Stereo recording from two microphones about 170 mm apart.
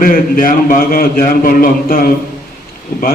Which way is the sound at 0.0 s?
55° left (ahead or behind).